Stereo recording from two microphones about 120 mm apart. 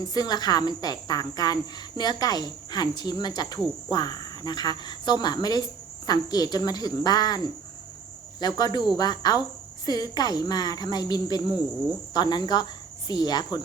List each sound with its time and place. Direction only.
0.0 s speech: 35° left (ahead or behind)